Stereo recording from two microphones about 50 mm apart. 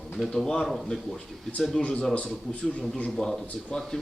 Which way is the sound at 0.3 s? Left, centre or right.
Centre.